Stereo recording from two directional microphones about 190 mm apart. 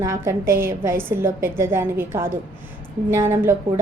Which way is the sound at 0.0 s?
15° right (ahead or behind).